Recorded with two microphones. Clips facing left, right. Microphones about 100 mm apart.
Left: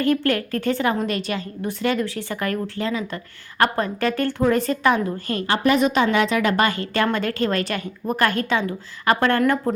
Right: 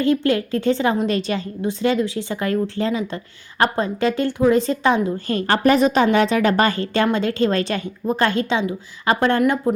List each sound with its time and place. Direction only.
0.0 s a woman's voice: 20° right (ahead or behind)
5.5 s a woman's voice: 40° right (ahead or behind); by 9.4 s 20° right (ahead or behind)